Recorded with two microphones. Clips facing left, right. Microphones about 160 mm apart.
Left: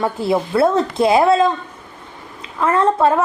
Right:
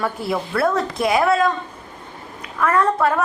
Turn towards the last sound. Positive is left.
turn(degrees=25)  # may be behind; listen again after turning